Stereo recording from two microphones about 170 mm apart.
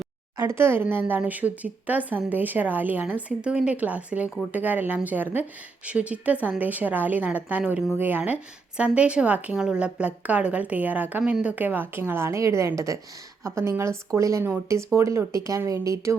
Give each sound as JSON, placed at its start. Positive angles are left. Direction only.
{"t": 0.3, "sound": "speech", "side_deg": -15}